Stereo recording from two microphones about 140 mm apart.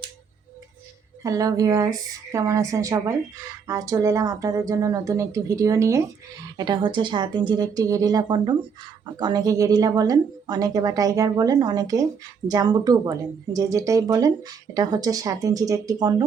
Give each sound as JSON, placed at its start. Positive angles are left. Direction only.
{"t": 1.2, "sound": "speech", "side_deg": -25}